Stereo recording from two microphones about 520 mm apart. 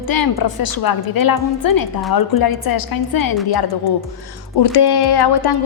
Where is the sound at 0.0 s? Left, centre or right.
Left.